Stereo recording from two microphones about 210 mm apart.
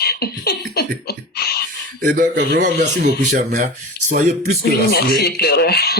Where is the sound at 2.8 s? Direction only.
35° right (ahead or behind).